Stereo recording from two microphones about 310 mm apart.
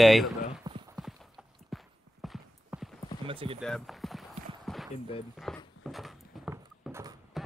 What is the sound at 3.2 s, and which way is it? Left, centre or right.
Clip-clop, centre.